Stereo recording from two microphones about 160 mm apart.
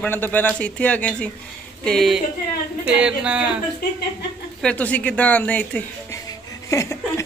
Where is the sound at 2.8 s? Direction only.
5° right (ahead or behind).